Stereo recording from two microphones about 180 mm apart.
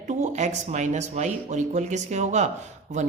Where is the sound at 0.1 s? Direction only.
40° right (ahead or behind).